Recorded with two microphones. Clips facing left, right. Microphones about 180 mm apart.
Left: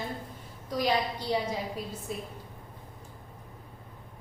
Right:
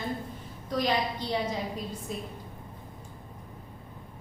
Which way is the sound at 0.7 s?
10° left (ahead or behind).